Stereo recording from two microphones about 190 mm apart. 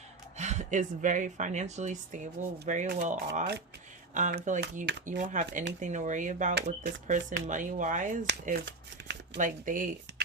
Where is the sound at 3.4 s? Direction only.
60° right (ahead or behind).